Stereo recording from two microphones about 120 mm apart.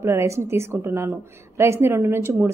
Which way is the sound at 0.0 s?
25° right (ahead or behind).